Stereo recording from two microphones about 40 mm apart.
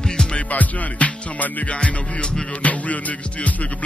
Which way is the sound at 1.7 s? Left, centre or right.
Left.